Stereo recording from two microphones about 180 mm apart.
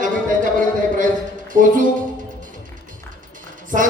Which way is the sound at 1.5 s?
45° right (ahead or behind).